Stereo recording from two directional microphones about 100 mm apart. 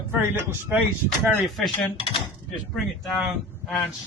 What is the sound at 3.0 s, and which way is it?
Speech, 5° right (ahead or behind).